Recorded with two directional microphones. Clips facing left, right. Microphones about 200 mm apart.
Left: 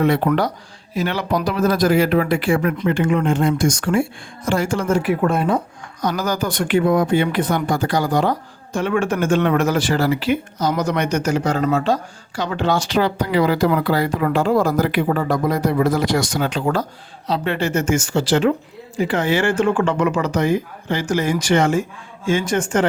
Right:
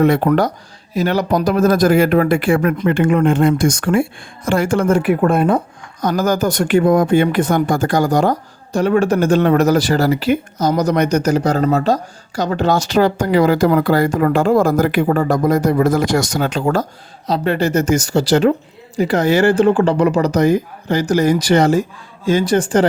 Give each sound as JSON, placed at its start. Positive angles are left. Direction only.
{"t": 0.0, "sound": "speech", "side_deg": -45}